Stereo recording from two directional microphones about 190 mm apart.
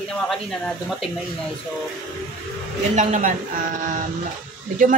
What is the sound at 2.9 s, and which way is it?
Speech, 40° right (ahead or behind).